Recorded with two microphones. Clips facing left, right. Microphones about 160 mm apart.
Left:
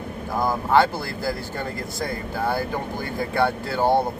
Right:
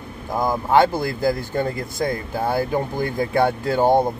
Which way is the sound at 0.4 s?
20° right (ahead or behind).